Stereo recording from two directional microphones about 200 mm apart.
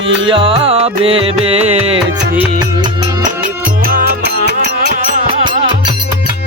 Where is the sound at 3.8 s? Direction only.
50° right (ahead or behind).